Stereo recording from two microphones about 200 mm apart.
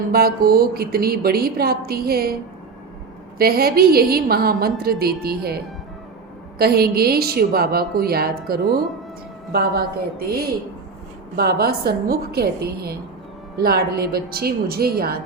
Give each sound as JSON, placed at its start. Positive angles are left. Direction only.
{"t": 0.1, "sound": "a woman's voice", "side_deg": -50}
{"t": 3.3, "sound": "a woman's voice", "side_deg": -50}
{"t": 6.6, "sound": "a woman's voice", "side_deg": -50}
{"t": 11.3, "sound": "a woman's voice", "side_deg": -50}